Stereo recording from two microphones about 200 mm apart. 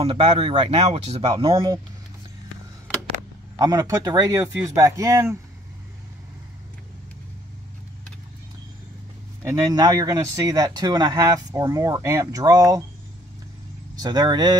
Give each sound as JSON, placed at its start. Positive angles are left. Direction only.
{"t": 0.0, "sound": "speech", "side_deg": -25}
{"t": 3.5, "sound": "speech", "side_deg": -20}
{"t": 9.4, "sound": "speech", "side_deg": -15}
{"t": 13.9, "sound": "speech", "side_deg": -20}